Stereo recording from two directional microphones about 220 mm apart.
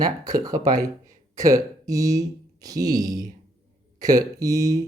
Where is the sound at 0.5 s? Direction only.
40° right (ahead or behind).